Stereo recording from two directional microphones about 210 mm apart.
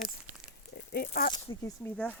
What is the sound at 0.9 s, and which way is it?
Speech, 45° left (ahead or behind).